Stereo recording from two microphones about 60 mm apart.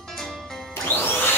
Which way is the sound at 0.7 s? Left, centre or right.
Left.